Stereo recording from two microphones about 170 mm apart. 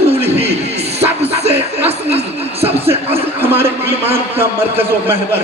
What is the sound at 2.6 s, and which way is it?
Speech, 35° right (ahead or behind).